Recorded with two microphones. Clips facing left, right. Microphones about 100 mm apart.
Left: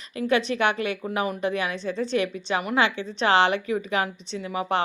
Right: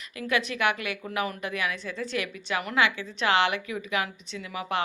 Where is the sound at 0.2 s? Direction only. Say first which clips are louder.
Left 5 dB; 30° left (ahead or behind).